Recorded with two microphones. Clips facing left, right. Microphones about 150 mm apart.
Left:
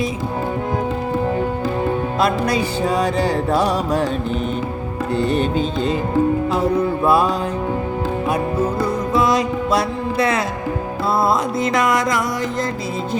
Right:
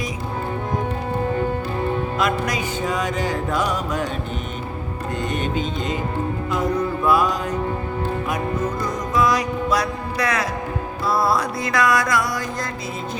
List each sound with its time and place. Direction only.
2.1 s music: 30° left (ahead or behind)
5.1 s music: 35° left (ahead or behind)